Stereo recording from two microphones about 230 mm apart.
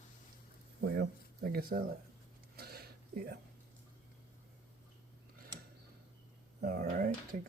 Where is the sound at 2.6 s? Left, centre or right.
Right.